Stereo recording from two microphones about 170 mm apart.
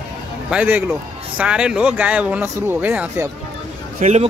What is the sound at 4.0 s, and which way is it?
Speech, 40° right (ahead or behind).